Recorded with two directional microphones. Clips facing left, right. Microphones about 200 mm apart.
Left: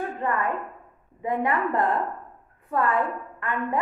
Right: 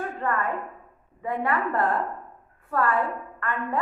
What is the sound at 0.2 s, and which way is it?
A woman's voice, 15° left (ahead or behind).